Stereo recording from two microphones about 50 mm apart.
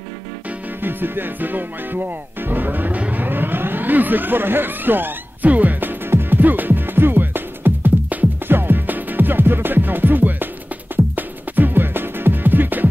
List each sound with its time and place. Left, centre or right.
0.8 s music: right
3.0 s a sound: right
8.5 s music: right